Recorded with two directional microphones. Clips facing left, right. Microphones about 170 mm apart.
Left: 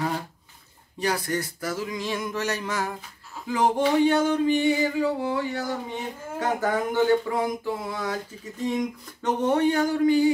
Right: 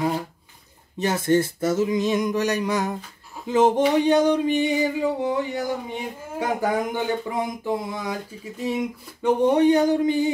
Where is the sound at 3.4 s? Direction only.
20° right (ahead or behind).